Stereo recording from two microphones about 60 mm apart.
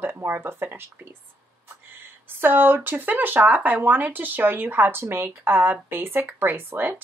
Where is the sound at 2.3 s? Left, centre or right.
Right.